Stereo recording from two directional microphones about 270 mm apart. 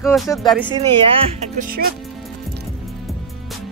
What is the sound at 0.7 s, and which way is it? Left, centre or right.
Speech, centre.